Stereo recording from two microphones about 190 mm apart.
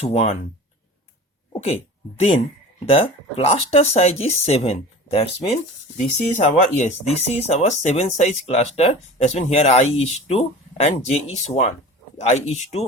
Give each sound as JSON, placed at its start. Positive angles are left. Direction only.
{"t": 0.0, "sound": "speech", "side_deg": 35}
{"t": 1.6, "sound": "speech", "side_deg": 35}